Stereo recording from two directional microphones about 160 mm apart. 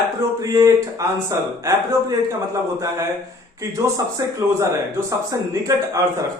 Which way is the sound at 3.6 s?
20° right (ahead or behind).